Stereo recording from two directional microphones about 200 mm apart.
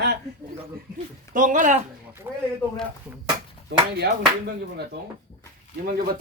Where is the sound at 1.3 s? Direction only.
40° right (ahead or behind).